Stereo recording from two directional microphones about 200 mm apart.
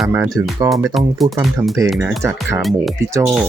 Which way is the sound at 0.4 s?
10° right (ahead or behind).